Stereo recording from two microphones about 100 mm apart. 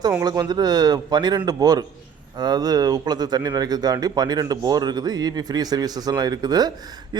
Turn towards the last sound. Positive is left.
turn(degrees=-40)  # may be behind; listen again after turning